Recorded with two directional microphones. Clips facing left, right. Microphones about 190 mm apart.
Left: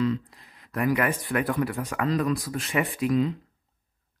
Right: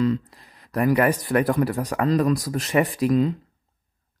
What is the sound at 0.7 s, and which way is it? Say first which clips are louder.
Speech: right 5 dB; 35° right (ahead or behind).